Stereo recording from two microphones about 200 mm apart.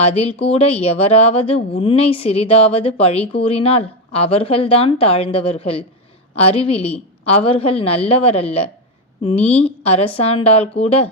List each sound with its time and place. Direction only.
0.0 s speech: 30° left (ahead or behind)